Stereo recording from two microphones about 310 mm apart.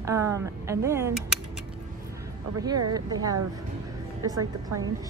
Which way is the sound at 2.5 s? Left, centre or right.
Centre.